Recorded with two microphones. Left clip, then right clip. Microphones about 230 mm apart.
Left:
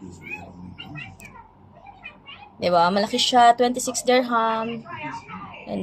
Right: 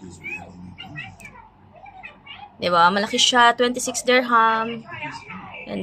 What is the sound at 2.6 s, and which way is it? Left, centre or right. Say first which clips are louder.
Speech: right 2 dB; right.